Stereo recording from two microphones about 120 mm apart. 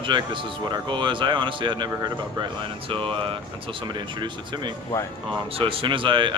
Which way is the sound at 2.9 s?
45° right (ahead or behind).